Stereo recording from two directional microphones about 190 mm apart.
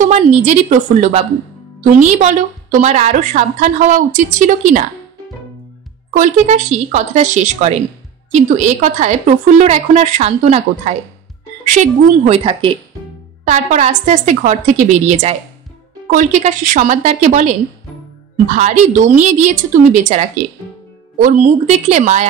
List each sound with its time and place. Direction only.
0.0 s a woman's voice: 35° right (ahead or behind)
6.1 s a woman's voice: 40° right (ahead or behind)
11.6 s a woman's voice: 40° right (ahead or behind)
13.5 s a woman's voice: 40° right (ahead or behind)
18.6 s a woman's voice: 40° right (ahead or behind)